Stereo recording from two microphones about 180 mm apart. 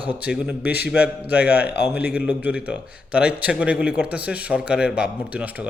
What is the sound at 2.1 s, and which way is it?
A man's voice, 10° right (ahead or behind).